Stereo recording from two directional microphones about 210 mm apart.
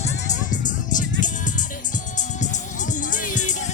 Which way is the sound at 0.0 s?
35° left (ahead or behind).